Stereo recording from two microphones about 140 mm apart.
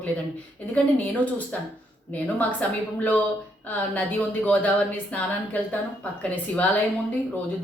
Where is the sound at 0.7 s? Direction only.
10° left (ahead or behind).